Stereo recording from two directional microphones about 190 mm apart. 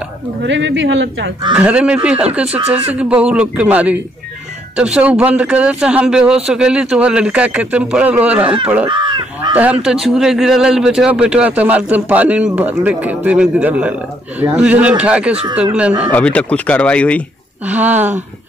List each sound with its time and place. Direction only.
0.4 s a man's voice: 75° right (ahead or behind)
1.5 s a man's voice: 5° right (ahead or behind)
8.8 s crow: 25° right (ahead or behind)
10.0 s a man's voice: centre (ahead or behind)
16.1 s speech: 5° left (ahead or behind)
17.6 s a man's voice: 10° right (ahead or behind)